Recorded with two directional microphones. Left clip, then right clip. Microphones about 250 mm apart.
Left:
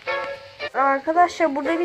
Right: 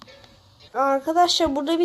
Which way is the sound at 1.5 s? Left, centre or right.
Centre.